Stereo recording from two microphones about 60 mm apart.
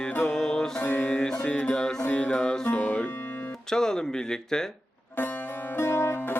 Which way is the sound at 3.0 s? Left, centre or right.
Left.